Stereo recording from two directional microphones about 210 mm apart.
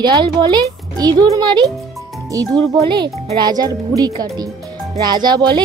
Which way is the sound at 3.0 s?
20° right (ahead or behind).